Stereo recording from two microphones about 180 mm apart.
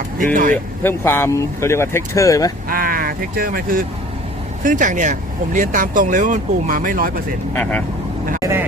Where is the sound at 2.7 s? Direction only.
50° right (ahead or behind).